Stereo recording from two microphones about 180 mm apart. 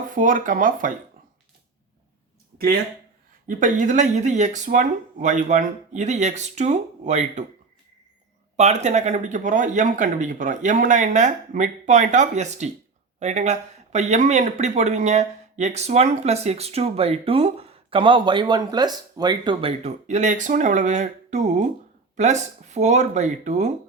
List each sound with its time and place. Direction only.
0.1 s speech: 45° right (ahead or behind)
3.4 s speech: 45° right (ahead or behind)
8.5 s speech: 40° right (ahead or behind)